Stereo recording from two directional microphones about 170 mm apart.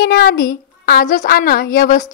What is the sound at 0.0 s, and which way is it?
A woman's voice, 65° left (ahead or behind).